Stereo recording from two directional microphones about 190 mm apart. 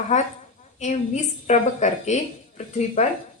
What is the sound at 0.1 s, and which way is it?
A woman's voice, 35° left (ahead or behind).